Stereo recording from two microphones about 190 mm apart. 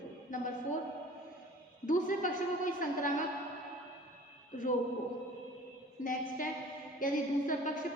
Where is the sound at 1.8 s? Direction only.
40° left (ahead or behind).